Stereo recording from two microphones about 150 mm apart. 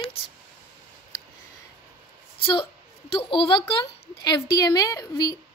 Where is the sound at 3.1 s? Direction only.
35° left (ahead or behind).